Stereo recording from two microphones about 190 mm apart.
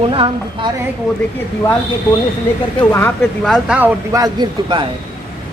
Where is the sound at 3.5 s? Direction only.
5° right (ahead or behind).